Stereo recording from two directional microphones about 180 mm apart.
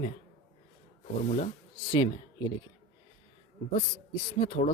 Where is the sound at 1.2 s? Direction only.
35° left (ahead or behind).